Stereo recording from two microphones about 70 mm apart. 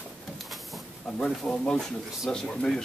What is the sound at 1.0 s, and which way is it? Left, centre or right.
Speech, centre.